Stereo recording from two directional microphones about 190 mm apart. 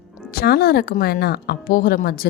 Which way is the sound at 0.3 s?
55° left (ahead or behind).